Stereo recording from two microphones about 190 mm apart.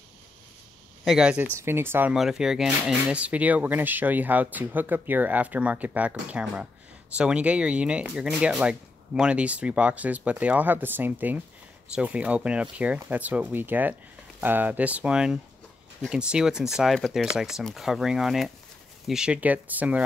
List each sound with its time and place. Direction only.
1.0 s speech: 5° right (ahead or behind)